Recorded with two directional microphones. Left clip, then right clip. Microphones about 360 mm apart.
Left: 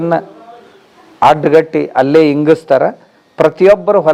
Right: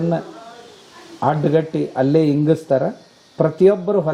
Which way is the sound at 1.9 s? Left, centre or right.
Centre.